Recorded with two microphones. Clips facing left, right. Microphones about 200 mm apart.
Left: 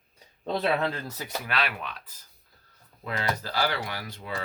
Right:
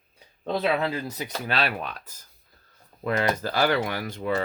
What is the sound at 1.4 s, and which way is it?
Speech, 35° right (ahead or behind).